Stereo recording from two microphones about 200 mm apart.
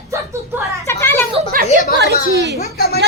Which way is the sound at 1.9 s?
55° right (ahead or behind).